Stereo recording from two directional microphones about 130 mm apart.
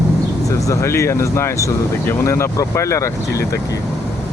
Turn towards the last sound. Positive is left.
turn(degrees=20)  # may be behind; listen again after turning